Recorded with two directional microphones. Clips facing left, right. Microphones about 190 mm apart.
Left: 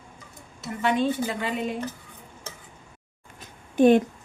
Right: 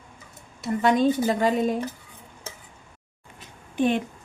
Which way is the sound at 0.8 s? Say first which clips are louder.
Right 3 dB; 40° right (ahead or behind).